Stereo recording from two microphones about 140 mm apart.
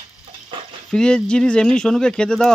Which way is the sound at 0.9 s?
5° left (ahead or behind).